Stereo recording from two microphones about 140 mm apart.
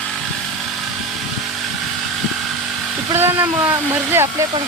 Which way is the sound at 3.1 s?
15° right (ahead or behind).